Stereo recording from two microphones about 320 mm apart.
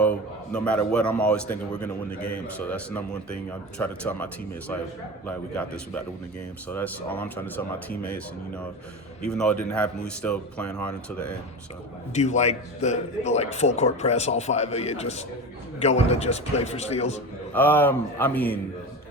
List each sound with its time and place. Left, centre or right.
0.5 s speech: centre
12.1 s a man's voice: left
17.5 s speech: centre